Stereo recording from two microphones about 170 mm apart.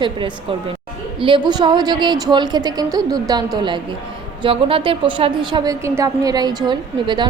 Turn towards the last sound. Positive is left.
turn(degrees=-25)  # may be behind; listen again after turning